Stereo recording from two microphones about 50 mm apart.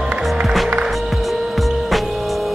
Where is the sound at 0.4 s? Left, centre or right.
Centre.